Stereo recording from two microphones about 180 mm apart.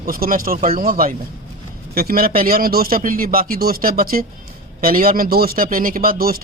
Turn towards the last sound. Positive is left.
turn(degrees=-55)  # may be behind; listen again after turning